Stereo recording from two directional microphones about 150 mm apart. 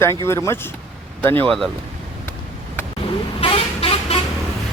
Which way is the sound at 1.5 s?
Centre (ahead or behind).